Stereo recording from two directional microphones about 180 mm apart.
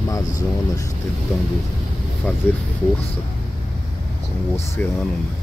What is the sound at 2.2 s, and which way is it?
Speech, 10° left (ahead or behind).